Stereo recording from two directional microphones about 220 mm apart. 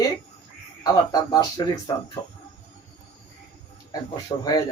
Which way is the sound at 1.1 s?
15° left (ahead or behind).